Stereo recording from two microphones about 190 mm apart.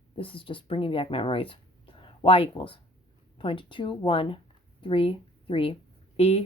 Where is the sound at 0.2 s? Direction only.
25° left (ahead or behind).